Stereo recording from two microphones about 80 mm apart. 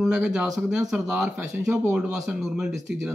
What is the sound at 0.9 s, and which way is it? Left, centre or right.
Speech, right.